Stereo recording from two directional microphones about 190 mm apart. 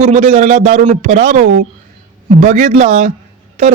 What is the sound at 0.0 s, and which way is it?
Speech, 40° right (ahead or behind).